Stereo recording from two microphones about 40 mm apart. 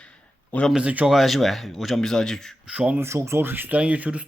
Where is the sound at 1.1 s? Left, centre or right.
Centre.